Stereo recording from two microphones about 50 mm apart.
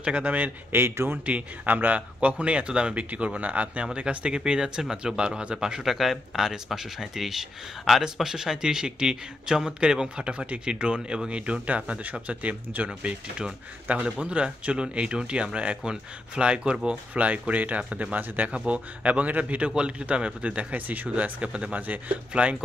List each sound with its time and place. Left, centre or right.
0.0 s speech: right
0.8 s speech: right
1.1 s speech: right
5.9 s speech: centre; by 19.7 s right
19.7 s speech: centre